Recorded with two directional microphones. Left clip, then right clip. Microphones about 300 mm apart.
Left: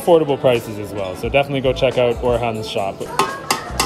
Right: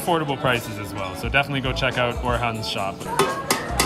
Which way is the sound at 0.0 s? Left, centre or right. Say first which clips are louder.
Left 8 dB; right.